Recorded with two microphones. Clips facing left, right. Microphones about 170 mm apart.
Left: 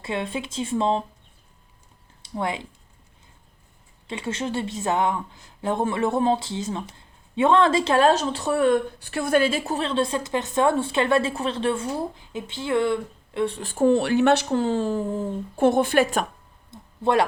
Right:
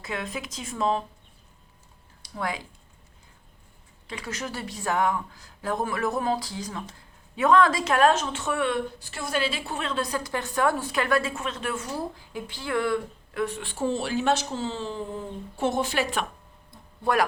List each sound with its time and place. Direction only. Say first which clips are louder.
0.0 s a woman's voice: left 5 dB; 30° left (ahead or behind)
2.2 s speech: left 4 dB; 25° left (ahead or behind)
4.0 s a woman's voice: left 6 dB; 25° left (ahead or behind)
9.0 s a woman's voice: left 8 dB; 60° left (ahead or behind)
16.7 s a sound: left 4 dB; 25° left (ahead or behind)